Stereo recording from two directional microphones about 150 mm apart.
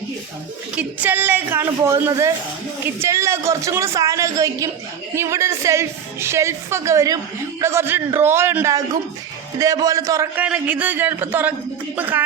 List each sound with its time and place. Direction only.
0.8 s a woman's voice: 10° right (ahead or behind)
10.3 s a woman's voice: 10° right (ahead or behind)